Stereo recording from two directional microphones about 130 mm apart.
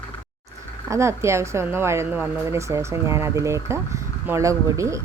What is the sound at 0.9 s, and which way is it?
Speech, 20° right (ahead or behind).